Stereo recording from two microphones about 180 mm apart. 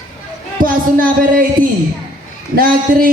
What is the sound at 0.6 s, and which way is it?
Speech, 50° right (ahead or behind).